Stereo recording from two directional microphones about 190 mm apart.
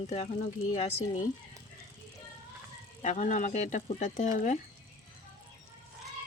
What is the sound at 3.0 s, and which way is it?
A woman's voice, 40° left (ahead or behind).